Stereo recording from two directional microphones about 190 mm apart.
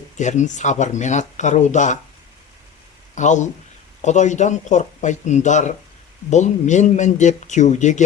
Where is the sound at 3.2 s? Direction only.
40° left (ahead or behind).